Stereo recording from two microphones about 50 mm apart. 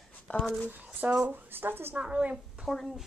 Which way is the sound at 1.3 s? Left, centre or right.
Right.